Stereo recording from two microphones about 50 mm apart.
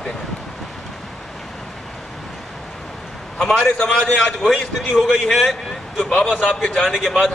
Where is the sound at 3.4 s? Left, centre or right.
Centre.